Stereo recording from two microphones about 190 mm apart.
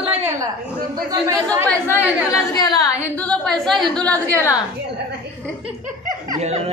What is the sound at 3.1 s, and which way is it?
Speech, 5° left (ahead or behind).